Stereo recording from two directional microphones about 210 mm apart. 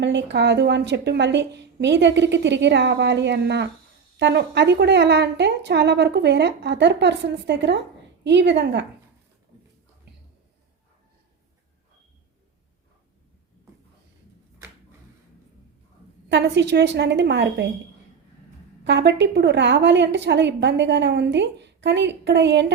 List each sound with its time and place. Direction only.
0.0 s a woman's voice: 55° right (ahead or behind)
16.3 s a woman's voice: 55° right (ahead or behind)
18.9 s a woman's voice: 55° right (ahead or behind)